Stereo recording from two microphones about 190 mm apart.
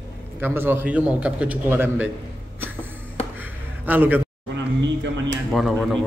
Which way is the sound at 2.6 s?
10° right (ahead or behind).